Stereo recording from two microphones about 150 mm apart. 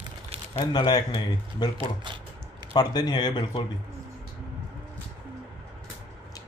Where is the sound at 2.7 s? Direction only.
25° left (ahead or behind).